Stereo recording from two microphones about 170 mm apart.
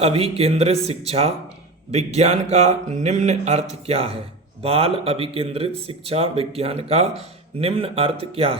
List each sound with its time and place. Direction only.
0.0 s speech: 35° right (ahead or behind)